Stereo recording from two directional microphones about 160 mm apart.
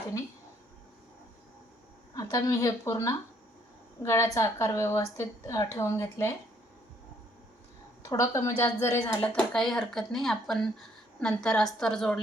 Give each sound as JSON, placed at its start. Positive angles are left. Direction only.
{"t": 2.1, "sound": "a woman's voice", "side_deg": 20}
{"t": 8.0, "sound": "speech", "side_deg": 20}